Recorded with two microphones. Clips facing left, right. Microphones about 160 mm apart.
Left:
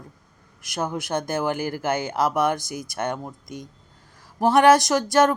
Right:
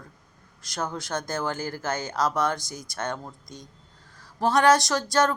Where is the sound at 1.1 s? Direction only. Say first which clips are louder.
Left 6 dB; 20° left (ahead or behind).